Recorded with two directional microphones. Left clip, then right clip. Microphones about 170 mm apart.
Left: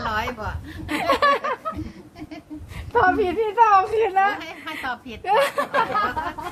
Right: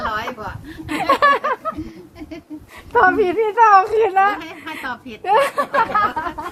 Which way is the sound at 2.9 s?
40° right (ahead or behind).